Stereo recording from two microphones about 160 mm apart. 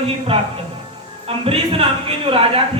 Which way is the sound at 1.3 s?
35° right (ahead or behind).